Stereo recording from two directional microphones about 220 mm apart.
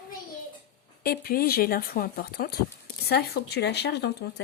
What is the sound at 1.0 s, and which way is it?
Speech, 40° left (ahead or behind).